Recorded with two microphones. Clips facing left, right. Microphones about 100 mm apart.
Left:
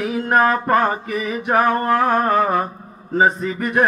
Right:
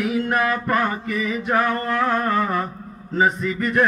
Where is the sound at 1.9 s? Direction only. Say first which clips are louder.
Left 4 dB; 50° left (ahead or behind).